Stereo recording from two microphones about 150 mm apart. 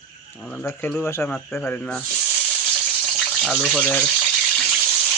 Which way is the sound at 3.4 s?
5° left (ahead or behind).